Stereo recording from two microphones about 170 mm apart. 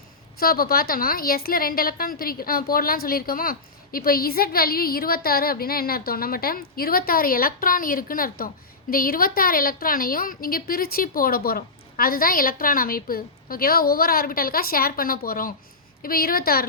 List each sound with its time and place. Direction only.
0.3 s a woman's voice: 60° left (ahead or behind)